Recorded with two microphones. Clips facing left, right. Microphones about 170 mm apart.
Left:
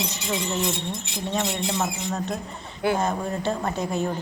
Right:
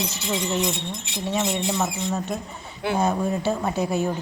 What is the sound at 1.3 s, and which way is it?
Speech, 5° right (ahead or behind).